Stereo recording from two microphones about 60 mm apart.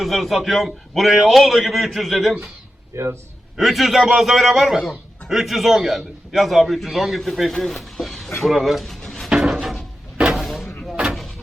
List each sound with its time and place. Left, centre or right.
0.0 s a man's voice: centre
2.9 s a man's voice: right
3.6 s a man's voice: centre
9.0 s a sound: centre
9.3 s drawer open or close: centre
10.2 s vehicle: centre